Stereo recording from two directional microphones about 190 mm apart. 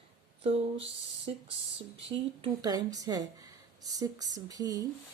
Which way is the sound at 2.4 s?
20° right (ahead or behind).